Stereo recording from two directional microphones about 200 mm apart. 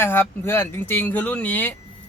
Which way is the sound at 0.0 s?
10° left (ahead or behind).